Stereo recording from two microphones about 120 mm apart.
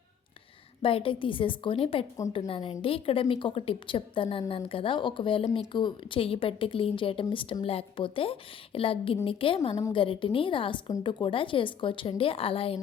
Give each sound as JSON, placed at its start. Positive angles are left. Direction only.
{"t": 0.8, "sound": "speech", "side_deg": 50}